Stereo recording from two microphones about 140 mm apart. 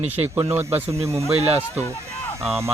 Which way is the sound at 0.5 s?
20° right (ahead or behind).